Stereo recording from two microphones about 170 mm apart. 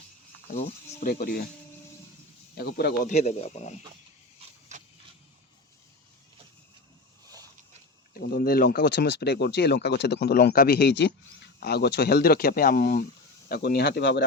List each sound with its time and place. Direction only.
0.5 s speech: 40° left (ahead or behind)
1.0 s speech: 60° left (ahead or behind)
2.6 s speech: 70° left (ahead or behind)
3.0 s speech: 45° left (ahead or behind)
4.7 s a sound: 45° right (ahead or behind)
8.2 s speech: 60° left (ahead or behind); by 14.3 s 90° left